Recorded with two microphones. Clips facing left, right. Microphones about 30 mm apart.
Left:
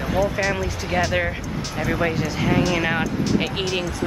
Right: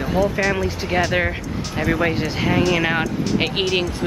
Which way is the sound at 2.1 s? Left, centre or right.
Right.